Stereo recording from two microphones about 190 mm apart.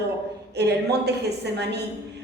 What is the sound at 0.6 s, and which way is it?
A woman's voice, 60° right (ahead or behind).